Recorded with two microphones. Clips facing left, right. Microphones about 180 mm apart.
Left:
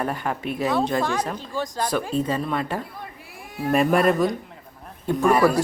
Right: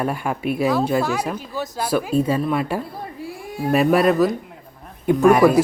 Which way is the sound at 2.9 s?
30° right (ahead or behind).